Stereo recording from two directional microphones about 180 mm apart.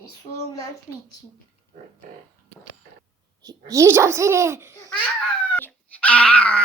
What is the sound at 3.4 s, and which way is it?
A child's voice, 15° right (ahead or behind).